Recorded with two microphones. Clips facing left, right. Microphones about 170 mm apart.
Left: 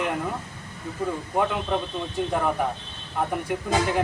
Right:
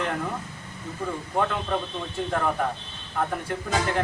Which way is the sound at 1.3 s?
10° left (ahead or behind).